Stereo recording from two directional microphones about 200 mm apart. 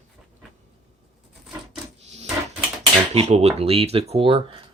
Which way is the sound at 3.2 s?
30° right (ahead or behind).